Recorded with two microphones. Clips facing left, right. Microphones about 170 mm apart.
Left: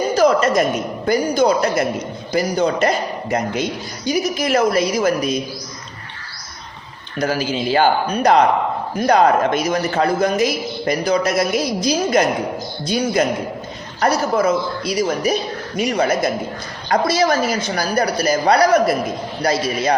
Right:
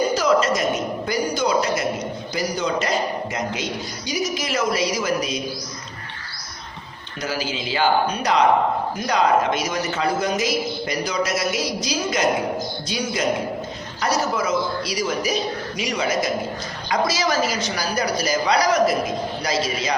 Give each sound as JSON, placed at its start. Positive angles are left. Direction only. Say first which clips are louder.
{"t": 0.1, "sound": "a sound", "louder": "left 4 dB", "side_deg": 55}
{"t": 1.0, "sound": "a man's voice", "louder": "left 8 dB", "side_deg": 55}
{"t": 7.2, "sound": "a man's voice", "louder": "left 7 dB", "side_deg": 50}